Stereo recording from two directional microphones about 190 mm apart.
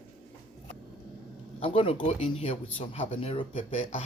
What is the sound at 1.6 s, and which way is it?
Speech, 30° left (ahead or behind).